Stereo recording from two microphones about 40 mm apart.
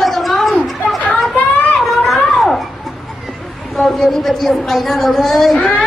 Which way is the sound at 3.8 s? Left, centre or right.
Centre.